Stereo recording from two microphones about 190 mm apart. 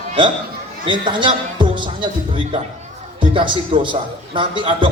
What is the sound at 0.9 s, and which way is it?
A man's voice, 25° right (ahead or behind).